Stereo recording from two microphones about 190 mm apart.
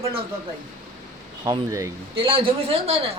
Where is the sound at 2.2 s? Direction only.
25° right (ahead or behind).